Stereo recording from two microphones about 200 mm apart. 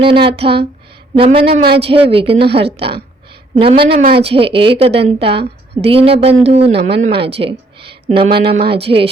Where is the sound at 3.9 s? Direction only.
50° right (ahead or behind).